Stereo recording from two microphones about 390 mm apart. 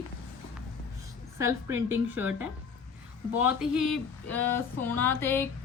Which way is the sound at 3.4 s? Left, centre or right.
Centre.